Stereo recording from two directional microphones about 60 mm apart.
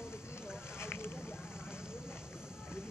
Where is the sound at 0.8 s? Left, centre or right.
Left.